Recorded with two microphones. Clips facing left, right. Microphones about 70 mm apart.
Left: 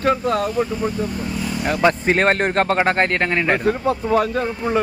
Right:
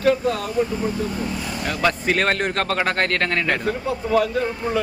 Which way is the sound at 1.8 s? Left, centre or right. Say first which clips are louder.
Left 4 dB; left.